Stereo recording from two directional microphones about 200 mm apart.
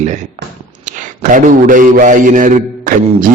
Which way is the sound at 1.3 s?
40° right (ahead or behind).